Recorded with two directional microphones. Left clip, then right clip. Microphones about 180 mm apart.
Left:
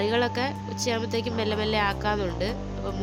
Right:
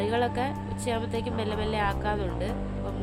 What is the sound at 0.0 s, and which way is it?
Speech, 15° left (ahead or behind).